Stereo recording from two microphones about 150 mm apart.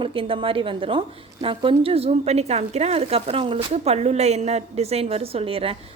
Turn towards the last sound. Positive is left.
turn(degrees=-40)  # may be behind; listen again after turning